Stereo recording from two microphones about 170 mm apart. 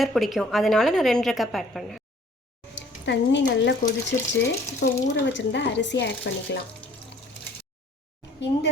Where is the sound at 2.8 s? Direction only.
90° left.